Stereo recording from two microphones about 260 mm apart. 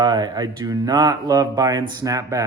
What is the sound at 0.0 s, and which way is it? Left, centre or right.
Speech, centre.